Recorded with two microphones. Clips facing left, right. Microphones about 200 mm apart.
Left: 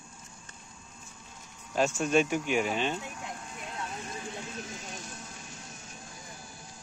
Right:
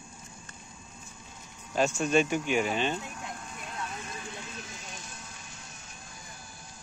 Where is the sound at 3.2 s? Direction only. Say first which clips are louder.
Even; 25° left (ahead or behind).